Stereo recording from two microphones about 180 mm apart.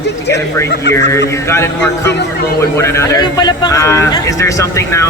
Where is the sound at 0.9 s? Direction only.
75° left (ahead or behind).